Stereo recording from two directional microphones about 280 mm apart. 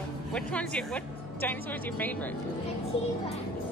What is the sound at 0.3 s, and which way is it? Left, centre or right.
Speech, centre.